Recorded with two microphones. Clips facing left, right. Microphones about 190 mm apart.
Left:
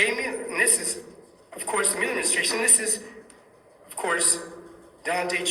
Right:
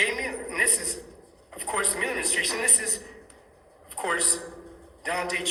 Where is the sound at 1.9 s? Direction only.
15° left (ahead or behind).